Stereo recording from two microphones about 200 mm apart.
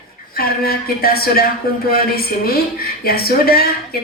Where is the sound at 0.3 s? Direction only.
50° left (ahead or behind).